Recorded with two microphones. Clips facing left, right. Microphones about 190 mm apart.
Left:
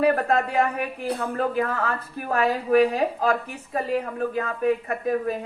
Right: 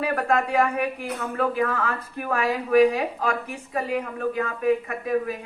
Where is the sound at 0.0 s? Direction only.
35° left (ahead or behind).